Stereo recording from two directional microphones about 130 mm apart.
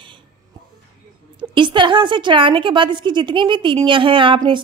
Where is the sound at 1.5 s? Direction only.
40° right (ahead or behind).